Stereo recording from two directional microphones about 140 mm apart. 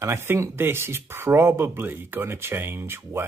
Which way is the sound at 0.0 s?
20° right (ahead or behind).